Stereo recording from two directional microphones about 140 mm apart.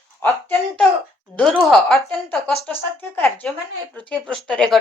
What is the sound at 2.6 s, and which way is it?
Speech, 15° left (ahead or behind).